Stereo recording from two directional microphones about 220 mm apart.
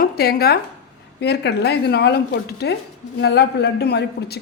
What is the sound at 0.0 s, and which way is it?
Speech, 45° left (ahead or behind).